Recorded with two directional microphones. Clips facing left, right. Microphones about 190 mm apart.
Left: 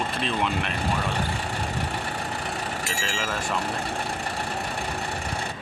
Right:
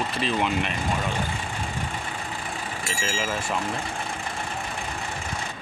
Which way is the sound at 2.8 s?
Centre (ahead or behind).